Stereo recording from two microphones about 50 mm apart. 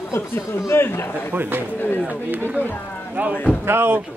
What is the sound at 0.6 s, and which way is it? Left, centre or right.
Speech, left.